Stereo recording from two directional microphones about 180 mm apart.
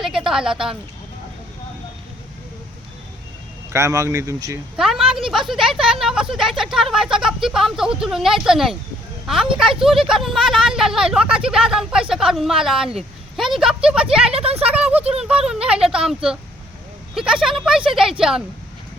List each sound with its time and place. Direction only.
0.0 s a woman's voice: 5° right (ahead or behind)
3.7 s speech: 15° right (ahead or behind)
4.8 s a woman's voice: centre (ahead or behind)
14.3 s speech: 35° right (ahead or behind)
14.7 s speech: 5° right (ahead or behind)